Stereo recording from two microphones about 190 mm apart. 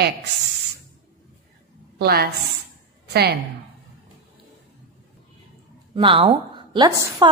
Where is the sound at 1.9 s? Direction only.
55° right (ahead or behind).